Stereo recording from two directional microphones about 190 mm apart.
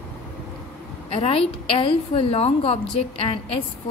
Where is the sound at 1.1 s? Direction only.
30° left (ahead or behind).